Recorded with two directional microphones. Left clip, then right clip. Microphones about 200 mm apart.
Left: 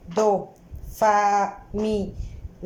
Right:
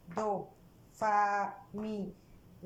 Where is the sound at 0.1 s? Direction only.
25° left (ahead or behind).